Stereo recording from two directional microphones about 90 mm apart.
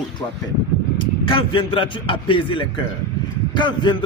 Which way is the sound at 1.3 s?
75° left (ahead or behind).